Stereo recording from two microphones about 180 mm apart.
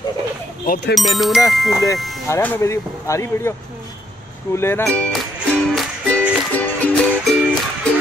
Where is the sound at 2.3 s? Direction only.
15° left (ahead or behind).